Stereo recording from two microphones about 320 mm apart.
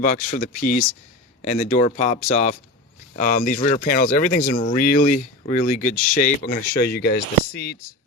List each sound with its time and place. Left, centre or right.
0.0 s speech: left